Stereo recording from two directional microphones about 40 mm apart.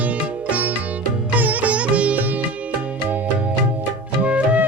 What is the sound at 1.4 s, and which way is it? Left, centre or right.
Music, right.